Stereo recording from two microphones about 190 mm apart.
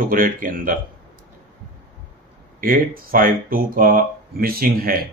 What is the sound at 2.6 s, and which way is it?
Speech, 50° right (ahead or behind).